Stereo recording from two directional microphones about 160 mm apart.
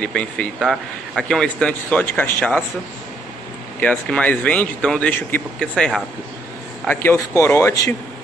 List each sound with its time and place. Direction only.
0.0 s speech: 5° left (ahead or behind)
3.8 s speech: 10° left (ahead or behind)